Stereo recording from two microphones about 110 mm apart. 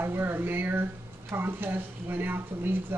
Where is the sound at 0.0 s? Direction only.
20° right (ahead or behind).